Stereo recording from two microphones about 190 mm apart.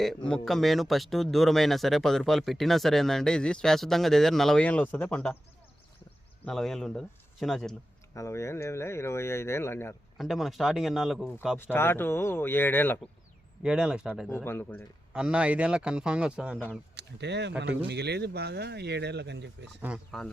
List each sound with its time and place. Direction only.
0.0 s speech: 5° left (ahead or behind)
6.4 s speech: centre (ahead or behind)
8.1 s speech: 15° left (ahead or behind)
10.2 s speech: centre (ahead or behind)
11.5 s speech: 10° left (ahead or behind)
13.6 s speech: 5° right (ahead or behind)
14.3 s speech: 10° left (ahead or behind)
15.1 s speech: 5° right (ahead or behind)
16.9 s speech: 65° right (ahead or behind)
20.1 s speech: 5° left (ahead or behind)